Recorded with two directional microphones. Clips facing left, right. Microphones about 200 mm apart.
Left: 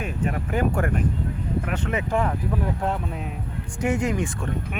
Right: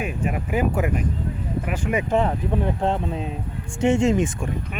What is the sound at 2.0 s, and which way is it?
Speech, 25° right (ahead or behind).